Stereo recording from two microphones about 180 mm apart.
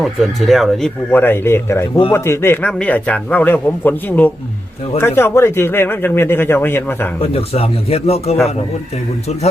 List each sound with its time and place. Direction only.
0.0 s a man's voice: centre (ahead or behind)
7.2 s speech: 35° left (ahead or behind)